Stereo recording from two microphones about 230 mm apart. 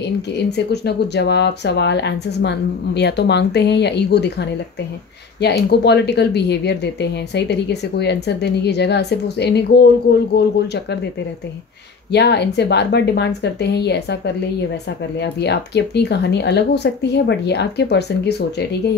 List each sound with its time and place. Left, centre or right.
0.3 s speech: left
12.1 s speech: left